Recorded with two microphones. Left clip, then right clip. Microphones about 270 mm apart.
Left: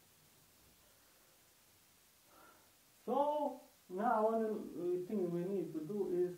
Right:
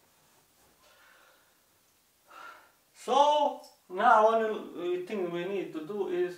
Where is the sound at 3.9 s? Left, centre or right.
Centre.